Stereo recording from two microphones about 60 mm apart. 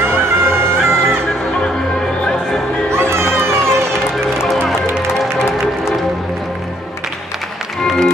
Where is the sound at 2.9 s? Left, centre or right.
Right.